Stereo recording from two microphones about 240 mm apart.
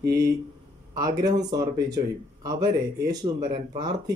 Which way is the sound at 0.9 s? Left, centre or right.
Centre.